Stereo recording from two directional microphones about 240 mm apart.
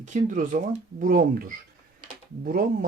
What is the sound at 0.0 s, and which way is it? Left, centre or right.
Speech, right.